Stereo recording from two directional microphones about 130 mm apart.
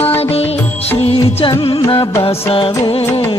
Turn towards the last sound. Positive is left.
turn(degrees=40)  # may be behind; listen again after turning